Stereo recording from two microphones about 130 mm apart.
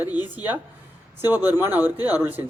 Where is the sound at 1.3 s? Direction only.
15° right (ahead or behind).